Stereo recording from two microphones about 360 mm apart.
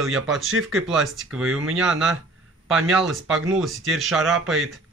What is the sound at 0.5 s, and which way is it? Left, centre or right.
Speech, right.